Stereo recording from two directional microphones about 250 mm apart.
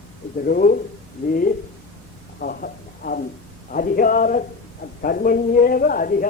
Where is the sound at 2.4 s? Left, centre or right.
Left.